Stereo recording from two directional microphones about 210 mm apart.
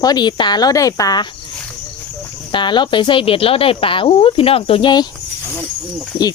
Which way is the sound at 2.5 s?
20° left (ahead or behind).